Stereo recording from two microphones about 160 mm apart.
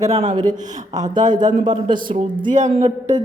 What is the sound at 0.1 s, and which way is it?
Speech, 40° right (ahead or behind).